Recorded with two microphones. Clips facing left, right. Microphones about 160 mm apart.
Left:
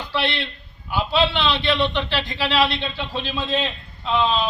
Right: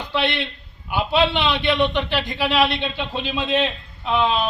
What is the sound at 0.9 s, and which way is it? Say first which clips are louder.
A man's voice: right 1 dB; 15° right (ahead or behind).